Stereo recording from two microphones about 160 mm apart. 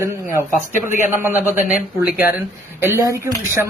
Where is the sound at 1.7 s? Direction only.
55° left (ahead or behind).